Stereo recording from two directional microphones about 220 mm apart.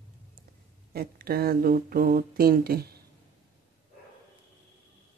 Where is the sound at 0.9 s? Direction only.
45° right (ahead or behind).